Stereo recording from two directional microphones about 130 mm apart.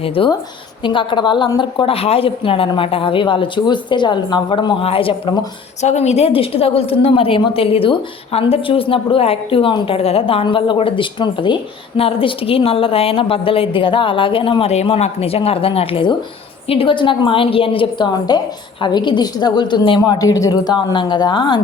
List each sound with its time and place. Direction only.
0.2 s a woman's voice: 45° left (ahead or behind)
5.8 s a woman's voice: 60° left (ahead or behind); by 20.1 s 40° left (ahead or behind)
20.2 s a woman's voice: 25° left (ahead or behind)